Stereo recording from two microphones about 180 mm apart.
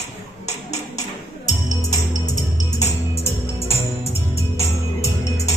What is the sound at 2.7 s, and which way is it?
Music, 35° left (ahead or behind).